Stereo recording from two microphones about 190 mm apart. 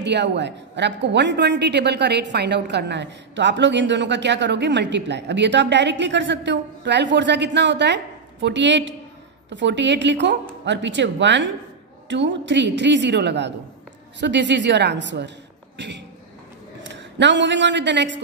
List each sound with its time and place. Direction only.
0.0 s a woman's voice: 65° right (ahead or behind)